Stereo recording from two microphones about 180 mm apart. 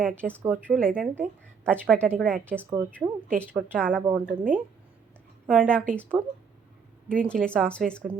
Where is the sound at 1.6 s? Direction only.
5° left (ahead or behind).